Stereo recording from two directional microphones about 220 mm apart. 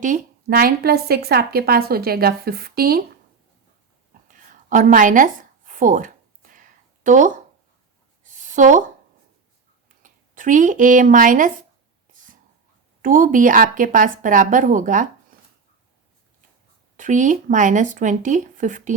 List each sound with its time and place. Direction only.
0.0 s speech: 40° right (ahead or behind)
4.4 s a sound: 35° right (ahead or behind)
10.0 s speech: 35° right (ahead or behind)
12.1 s a sound: 35° right (ahead or behind)
13.0 s a woman's voice: 35° right (ahead or behind)
17.0 s a woman's voice: 35° right (ahead or behind)